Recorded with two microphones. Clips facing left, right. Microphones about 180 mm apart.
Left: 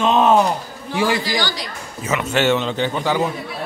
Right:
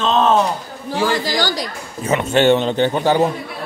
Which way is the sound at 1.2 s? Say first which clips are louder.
Right 3 dB; 45° right (ahead or behind).